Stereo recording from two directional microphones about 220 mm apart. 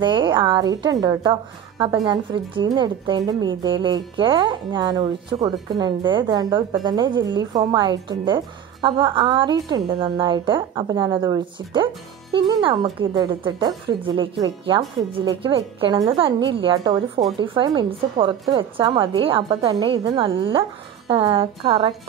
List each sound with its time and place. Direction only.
0.0 s a woman's voice: 20° right (ahead or behind)